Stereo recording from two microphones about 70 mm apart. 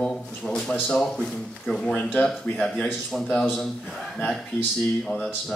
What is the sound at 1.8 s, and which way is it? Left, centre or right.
Speech, centre.